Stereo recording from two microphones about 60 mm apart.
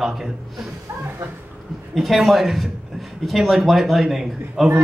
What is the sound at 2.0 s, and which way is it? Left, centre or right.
Speech, centre.